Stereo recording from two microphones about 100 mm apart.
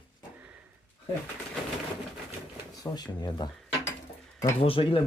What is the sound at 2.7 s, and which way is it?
Speech, 40° left (ahead or behind).